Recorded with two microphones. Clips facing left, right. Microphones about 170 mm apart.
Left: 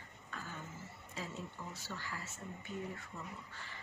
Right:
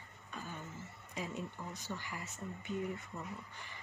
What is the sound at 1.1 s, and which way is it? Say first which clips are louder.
Speech: right 4 dB; 15° right (ahead or behind).